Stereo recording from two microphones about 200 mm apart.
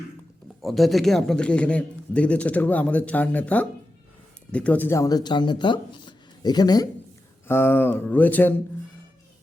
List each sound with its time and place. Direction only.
0.6 s speech: centre (ahead or behind)